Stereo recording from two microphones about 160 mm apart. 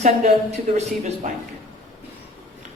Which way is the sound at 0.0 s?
45° right (ahead or behind).